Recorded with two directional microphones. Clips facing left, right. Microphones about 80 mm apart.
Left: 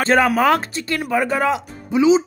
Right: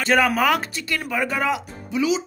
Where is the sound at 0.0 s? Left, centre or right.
Left.